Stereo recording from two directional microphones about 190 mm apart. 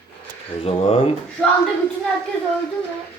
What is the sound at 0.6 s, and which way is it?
Speech, 30° left (ahead or behind).